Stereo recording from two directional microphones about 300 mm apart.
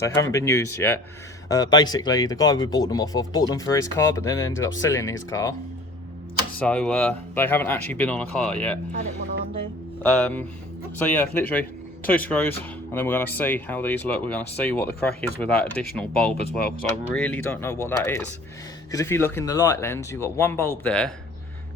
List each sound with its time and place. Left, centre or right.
0.0 s speech: centre
6.6 s speech: centre
8.9 s speech: right
10.0 s speech: centre
17.0 s speech: centre